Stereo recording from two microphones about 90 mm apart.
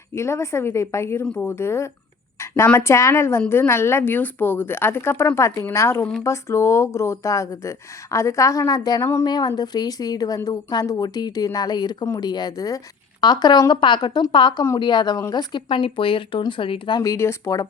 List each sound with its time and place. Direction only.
0.1 s speech: 30° left (ahead or behind)
1.2 s speech: 15° left (ahead or behind)
1.5 s a woman's voice: 30° left (ahead or behind); by 15.6 s 50° left (ahead or behind)
15.7 s speech: 75° left (ahead or behind)
17.0 s speech: 35° left (ahead or behind)